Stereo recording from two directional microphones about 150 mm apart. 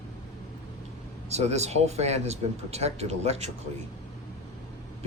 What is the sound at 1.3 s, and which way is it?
Speech, 45° right (ahead or behind).